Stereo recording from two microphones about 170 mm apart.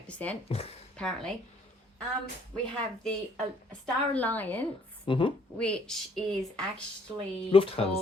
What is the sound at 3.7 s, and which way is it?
Speech, 5° left (ahead or behind).